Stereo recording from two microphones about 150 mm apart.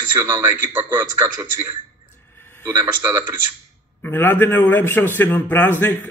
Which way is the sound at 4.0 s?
15° left (ahead or behind).